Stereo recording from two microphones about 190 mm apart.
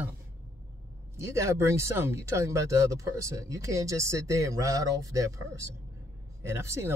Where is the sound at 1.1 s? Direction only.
15° right (ahead or behind).